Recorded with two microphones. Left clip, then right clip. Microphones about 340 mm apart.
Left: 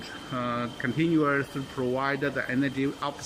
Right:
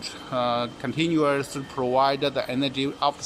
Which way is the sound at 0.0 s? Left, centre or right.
Centre.